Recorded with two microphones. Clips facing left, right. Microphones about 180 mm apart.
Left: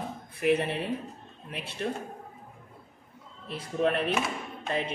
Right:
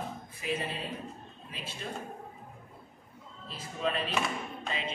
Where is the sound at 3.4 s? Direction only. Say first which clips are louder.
Left 6 dB; 65° left (ahead or behind).